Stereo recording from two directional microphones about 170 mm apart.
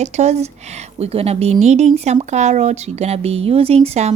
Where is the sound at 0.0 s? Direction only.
40° right (ahead or behind).